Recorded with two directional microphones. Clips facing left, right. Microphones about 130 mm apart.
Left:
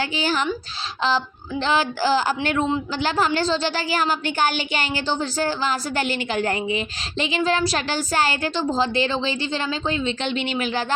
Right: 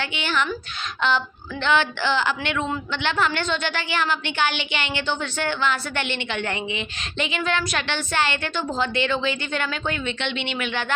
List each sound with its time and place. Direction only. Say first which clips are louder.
0.0 s a woman's voice: left 3 dB; 35° left (ahead or behind)